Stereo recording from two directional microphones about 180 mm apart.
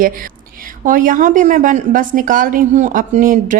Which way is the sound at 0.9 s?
50° right (ahead or behind).